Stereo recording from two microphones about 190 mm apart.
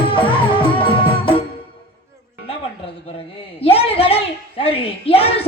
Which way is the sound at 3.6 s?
30° left (ahead or behind).